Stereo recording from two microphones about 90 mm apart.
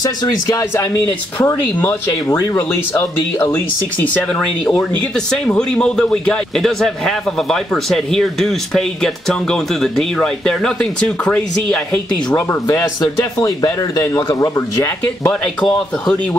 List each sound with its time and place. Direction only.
0.5 s speech: 35° left (ahead or behind)
3.5 s speech: 20° left (ahead or behind)
12.4 s speech: 30° left (ahead or behind)